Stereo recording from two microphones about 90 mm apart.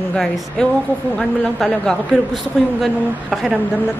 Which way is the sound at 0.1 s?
10° left (ahead or behind).